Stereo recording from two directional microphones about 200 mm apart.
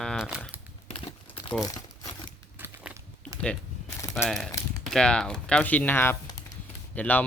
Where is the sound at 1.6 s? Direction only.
20° left (ahead or behind).